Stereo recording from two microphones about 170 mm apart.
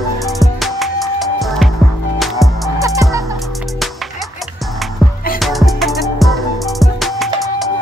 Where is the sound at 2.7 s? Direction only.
20° right (ahead or behind).